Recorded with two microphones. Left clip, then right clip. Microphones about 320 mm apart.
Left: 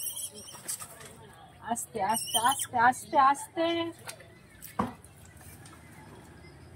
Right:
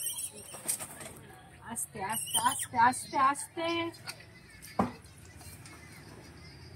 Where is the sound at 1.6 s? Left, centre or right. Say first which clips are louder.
Left 8 dB; centre.